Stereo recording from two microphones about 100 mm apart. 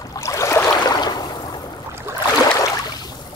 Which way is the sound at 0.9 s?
45° left (ahead or behind).